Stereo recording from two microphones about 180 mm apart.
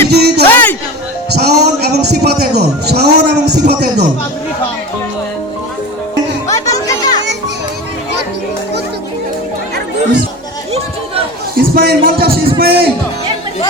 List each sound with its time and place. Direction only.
0.1 s music: 65° right (ahead or behind)
0.5 s a sound: 10° left (ahead or behind)
1.3 s music: 65° right (ahead or behind)
6.5 s music: 20° left (ahead or behind)
11.5 s a man's voice: 55° right (ahead or behind)